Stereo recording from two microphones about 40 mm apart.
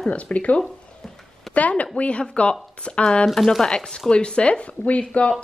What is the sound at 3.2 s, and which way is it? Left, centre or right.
Speech, centre.